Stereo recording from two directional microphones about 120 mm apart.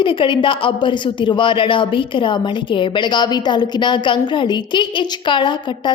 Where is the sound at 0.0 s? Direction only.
45° left (ahead or behind).